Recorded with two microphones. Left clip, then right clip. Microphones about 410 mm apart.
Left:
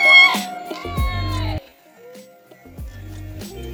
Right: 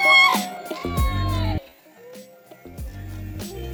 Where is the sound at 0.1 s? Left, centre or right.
Centre.